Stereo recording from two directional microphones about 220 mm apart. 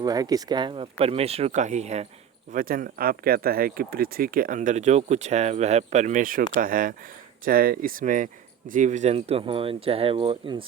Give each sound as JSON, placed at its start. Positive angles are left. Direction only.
{"t": 0.0, "sound": "speech", "side_deg": -15}